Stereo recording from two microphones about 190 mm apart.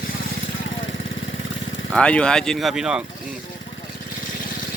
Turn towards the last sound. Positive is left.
turn(degrees=-5)  # may be behind; listen again after turning